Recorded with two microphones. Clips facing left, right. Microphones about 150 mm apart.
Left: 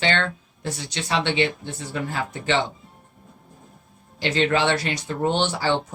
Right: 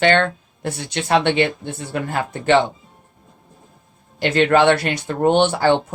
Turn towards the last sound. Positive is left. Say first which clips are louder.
# right 7 dB
turn(degrees=-55)  # may be behind; listen again after turning